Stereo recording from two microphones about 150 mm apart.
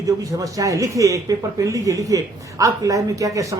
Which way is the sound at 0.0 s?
20° right (ahead or behind).